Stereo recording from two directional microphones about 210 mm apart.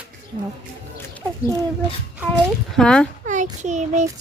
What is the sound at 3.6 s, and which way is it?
Speech, 35° right (ahead or behind).